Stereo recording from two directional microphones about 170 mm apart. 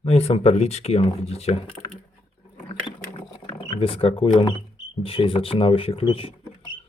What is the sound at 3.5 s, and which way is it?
Speech, 30° left (ahead or behind).